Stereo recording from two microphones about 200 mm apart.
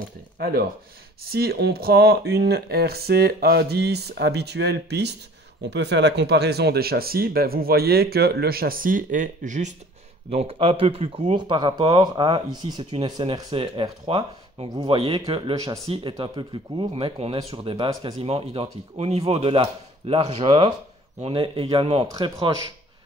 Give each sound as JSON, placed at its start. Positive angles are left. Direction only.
{"t": 0.4, "sound": "speech", "side_deg": -50}